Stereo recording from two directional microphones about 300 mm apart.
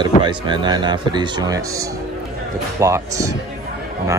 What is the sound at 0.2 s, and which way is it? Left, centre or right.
Speech, centre.